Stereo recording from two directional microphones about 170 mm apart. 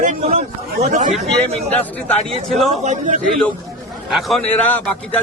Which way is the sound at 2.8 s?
45° right (ahead or behind).